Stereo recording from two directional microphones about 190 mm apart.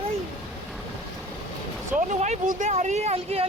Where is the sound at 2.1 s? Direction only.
40° right (ahead or behind).